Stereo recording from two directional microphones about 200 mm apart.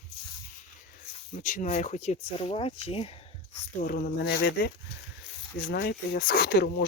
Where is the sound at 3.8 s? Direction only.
50° left (ahead or behind).